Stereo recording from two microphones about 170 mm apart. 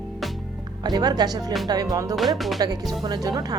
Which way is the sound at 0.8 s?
25° right (ahead or behind).